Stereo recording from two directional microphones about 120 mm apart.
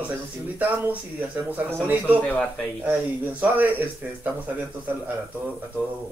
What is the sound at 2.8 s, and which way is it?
Speech, 15° right (ahead or behind).